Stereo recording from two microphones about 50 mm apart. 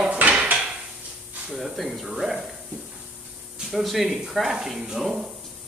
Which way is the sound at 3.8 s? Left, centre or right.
Centre.